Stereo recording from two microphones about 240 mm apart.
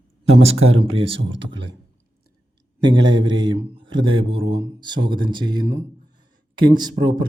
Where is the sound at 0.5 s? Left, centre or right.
Right.